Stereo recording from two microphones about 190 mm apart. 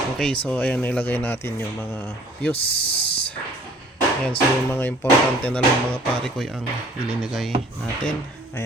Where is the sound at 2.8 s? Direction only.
30° left (ahead or behind).